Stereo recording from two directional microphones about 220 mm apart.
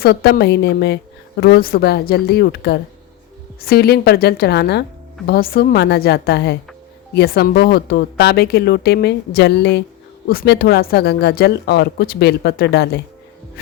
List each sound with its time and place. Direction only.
0.0 s speech: 45° left (ahead or behind)